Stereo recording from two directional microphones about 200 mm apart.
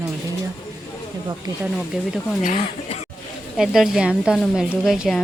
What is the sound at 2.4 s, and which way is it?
Speech, 35° left (ahead or behind).